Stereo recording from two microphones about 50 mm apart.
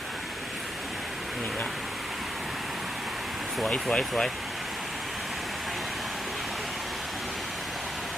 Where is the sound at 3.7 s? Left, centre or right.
Centre.